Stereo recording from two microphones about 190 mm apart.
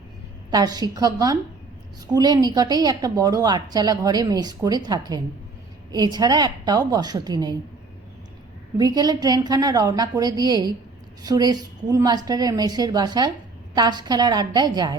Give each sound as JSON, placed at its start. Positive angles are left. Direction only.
{"t": 0.5, "sound": "a woman's voice", "side_deg": -20}
{"t": 8.8, "sound": "a woman's voice", "side_deg": -20}